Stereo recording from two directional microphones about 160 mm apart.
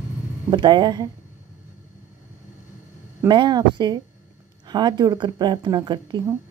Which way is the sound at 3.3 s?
30° right (ahead or behind).